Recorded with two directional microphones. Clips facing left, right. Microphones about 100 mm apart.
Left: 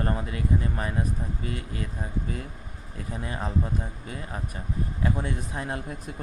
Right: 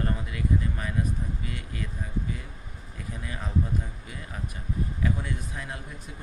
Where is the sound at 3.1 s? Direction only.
35° left (ahead or behind).